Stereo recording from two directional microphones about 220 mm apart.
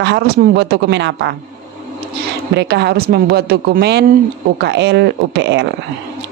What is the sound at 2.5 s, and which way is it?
A woman's voice, 50° right (ahead or behind).